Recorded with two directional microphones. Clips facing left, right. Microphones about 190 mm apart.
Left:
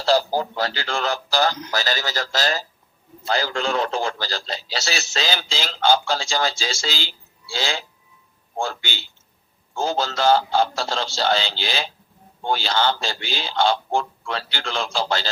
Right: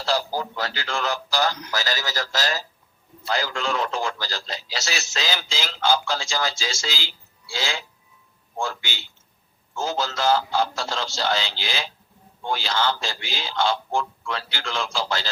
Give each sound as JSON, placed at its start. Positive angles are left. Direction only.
{"t": 0.0, "sound": "a man's voice", "side_deg": 30}